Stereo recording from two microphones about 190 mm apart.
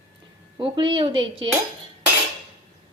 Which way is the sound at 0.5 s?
25° right (ahead or behind).